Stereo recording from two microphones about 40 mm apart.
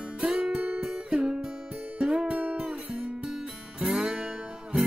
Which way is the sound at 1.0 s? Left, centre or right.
Right.